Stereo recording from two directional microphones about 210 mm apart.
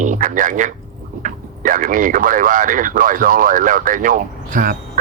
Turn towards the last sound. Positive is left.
turn(degrees=-40)  # may be behind; listen again after turning